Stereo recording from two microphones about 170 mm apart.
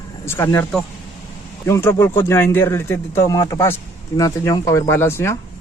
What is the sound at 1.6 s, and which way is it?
Speech, 15° left (ahead or behind).